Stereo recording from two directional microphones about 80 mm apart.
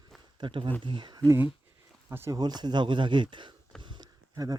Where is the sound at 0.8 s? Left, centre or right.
Right.